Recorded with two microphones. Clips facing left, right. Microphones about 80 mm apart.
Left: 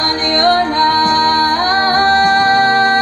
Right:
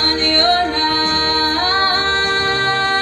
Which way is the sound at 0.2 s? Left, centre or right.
Left.